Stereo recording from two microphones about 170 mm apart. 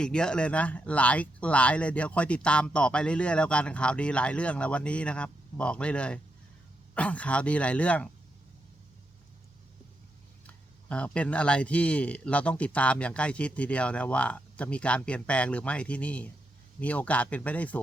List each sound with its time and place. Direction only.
0.0 s speech: 5° left (ahead or behind)
10.4 s speech: 10° left (ahead or behind)